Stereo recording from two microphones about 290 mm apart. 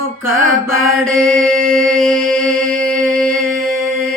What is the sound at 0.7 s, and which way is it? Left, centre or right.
Mantra, right.